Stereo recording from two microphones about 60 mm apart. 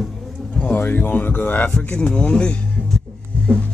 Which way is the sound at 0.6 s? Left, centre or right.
Left.